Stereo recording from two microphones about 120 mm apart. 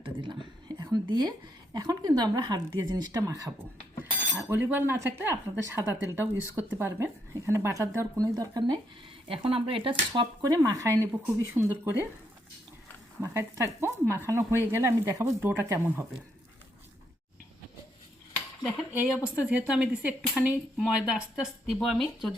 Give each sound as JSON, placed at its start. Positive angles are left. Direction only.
{"t": 0.0, "sound": "a sound", "side_deg": -40}
{"t": 1.7, "sound": "speech", "side_deg": -35}
{"t": 4.4, "sound": "speech", "side_deg": -20}
{"t": 9.3, "sound": "speech", "side_deg": -50}
{"t": 10.4, "sound": "speech", "side_deg": -30}
{"t": 13.2, "sound": "speech", "side_deg": -25}
{"t": 19.5, "sound": "speech", "side_deg": -10}